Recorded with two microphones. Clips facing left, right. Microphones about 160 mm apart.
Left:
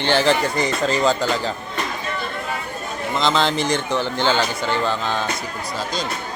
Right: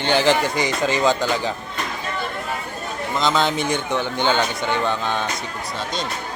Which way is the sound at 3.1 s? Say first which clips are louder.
Left 1 dB; centre (ahead or behind).